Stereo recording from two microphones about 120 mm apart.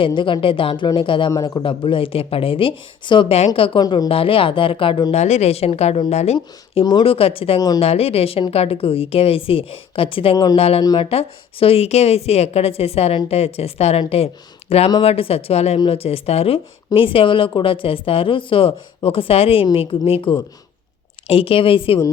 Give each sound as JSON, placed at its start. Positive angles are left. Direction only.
{"t": 0.0, "sound": "a woman's voice", "side_deg": 45}
{"t": 1.3, "sound": "speech", "side_deg": 30}
{"t": 1.6, "sound": "a woman's voice", "side_deg": 45}
{"t": 3.8, "sound": "speech", "side_deg": 35}
{"t": 4.1, "sound": "a woman's voice", "side_deg": 50}
{"t": 5.1, "sound": "speech", "side_deg": 65}
{"t": 7.0, "sound": "a woman's voice", "side_deg": 50}
{"t": 10.3, "sound": "speech", "side_deg": 35}
{"t": 10.6, "sound": "a woman's voice", "side_deg": 55}